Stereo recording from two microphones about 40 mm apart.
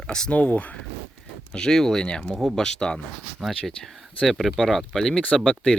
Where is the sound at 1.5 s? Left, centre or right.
Centre.